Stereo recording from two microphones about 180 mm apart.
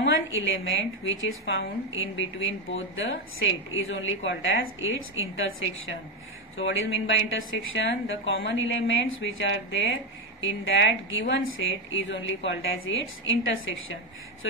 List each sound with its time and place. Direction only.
0.0 s a woman's voice: 90° left